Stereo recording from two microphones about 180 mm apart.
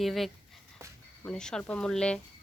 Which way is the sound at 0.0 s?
Centre (ahead or behind).